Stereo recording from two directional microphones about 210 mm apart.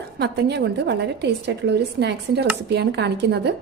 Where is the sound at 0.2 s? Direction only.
50° right (ahead or behind).